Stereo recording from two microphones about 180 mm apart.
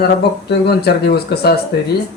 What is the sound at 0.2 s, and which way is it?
Speech, 65° left (ahead or behind).